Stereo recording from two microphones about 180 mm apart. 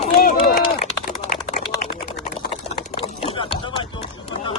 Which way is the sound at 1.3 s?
45° left (ahead or behind).